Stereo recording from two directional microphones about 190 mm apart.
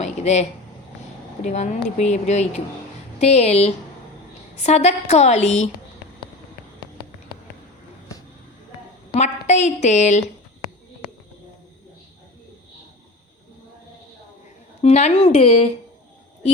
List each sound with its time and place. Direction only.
0.0 s a sound: 35° left (ahead or behind)
1.5 s a woman's voice: 40° left (ahead or behind)
9.1 s a woman's voice: 35° left (ahead or behind)
14.8 s a woman's voice: 35° left (ahead or behind)